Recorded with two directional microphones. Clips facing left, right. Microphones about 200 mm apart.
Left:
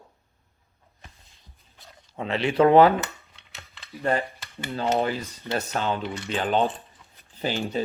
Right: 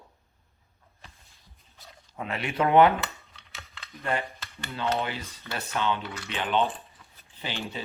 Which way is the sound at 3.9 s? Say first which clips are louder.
Left 5 dB; 35° left (ahead or behind).